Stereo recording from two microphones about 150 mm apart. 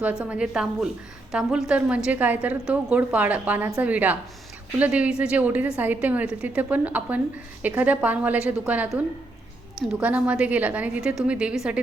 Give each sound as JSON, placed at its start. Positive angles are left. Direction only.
{"t": 0.0, "sound": "a woman's voice", "side_deg": -5}